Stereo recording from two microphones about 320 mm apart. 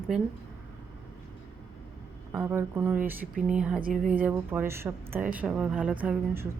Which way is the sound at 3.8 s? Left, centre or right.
Right.